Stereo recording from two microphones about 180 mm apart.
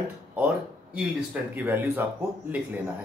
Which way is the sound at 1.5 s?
10° right (ahead or behind).